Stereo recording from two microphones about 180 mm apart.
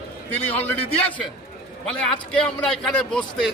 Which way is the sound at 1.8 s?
5° left (ahead or behind).